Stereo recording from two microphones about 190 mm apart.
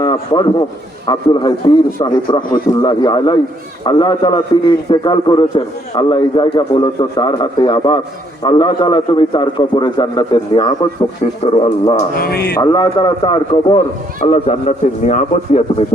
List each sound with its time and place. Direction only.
0.0 s a man's voice: 25° left (ahead or behind)
12.1 s speech: 50° left (ahead or behind)
12.5 s a man's voice: 20° left (ahead or behind)